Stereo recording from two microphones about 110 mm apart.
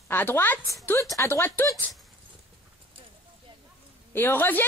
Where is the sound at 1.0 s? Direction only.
30° left (ahead or behind).